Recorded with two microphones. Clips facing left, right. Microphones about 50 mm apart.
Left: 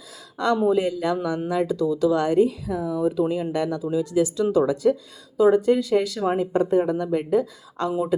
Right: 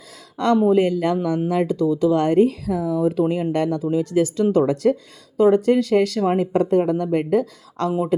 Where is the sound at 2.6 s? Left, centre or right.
Right.